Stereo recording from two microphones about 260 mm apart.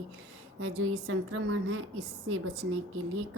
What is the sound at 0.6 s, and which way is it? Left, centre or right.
A woman's voice, right.